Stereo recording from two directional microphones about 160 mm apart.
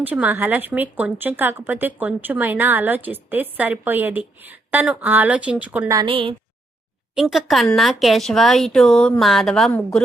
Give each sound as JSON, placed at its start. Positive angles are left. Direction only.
{"t": 0.0, "sound": "a woman's voice", "side_deg": -10}
{"t": 6.1, "sound": "a woman's voice", "side_deg": -35}
{"t": 7.2, "sound": "speech", "side_deg": 0}